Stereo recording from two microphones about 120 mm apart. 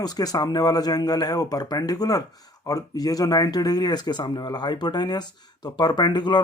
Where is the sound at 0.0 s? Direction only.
35° left (ahead or behind).